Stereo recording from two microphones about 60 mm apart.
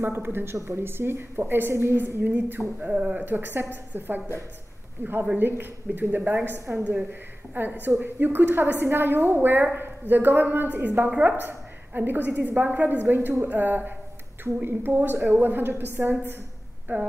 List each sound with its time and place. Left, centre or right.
0.0 s a woman's voice: right
2.0 s a woman's voice: right